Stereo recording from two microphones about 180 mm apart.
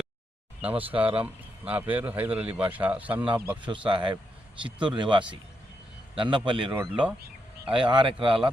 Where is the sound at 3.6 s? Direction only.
25° right (ahead or behind).